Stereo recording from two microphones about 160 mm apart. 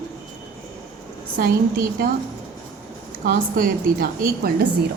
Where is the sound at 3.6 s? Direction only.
65° right (ahead or behind).